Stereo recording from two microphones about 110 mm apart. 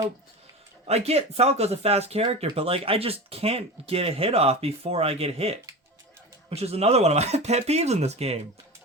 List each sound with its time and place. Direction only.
0.9 s speech: 70° right (ahead or behind)